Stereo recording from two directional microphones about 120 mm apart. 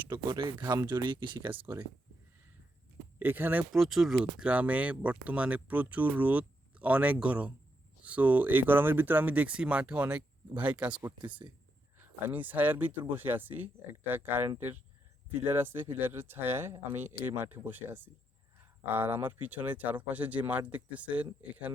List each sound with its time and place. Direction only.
0.1 s speech: 40° right (ahead or behind)
3.2 s speech: 15° right (ahead or behind)
3.7 s speech: centre (ahead or behind)
12.3 s speech: 15° right (ahead or behind)